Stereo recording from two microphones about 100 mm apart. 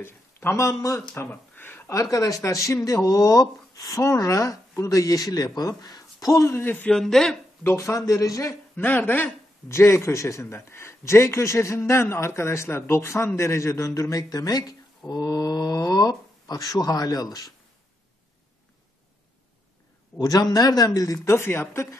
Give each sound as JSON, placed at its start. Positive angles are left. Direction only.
{"t": 0.0, "sound": "speech", "side_deg": 25}
{"t": 1.3, "sound": "a sound", "side_deg": 20}
{"t": 2.0, "sound": "speech", "side_deg": 35}
{"t": 6.9, "sound": "speech", "side_deg": 5}
{"t": 7.6, "sound": "speech", "side_deg": 25}
{"t": 8.7, "sound": "speech", "side_deg": 20}
{"t": 20.2, "sound": "speech", "side_deg": 40}
{"t": 21.2, "sound": "speech", "side_deg": 25}